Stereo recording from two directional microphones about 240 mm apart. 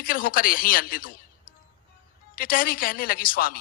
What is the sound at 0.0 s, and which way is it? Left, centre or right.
A woman's voice, left.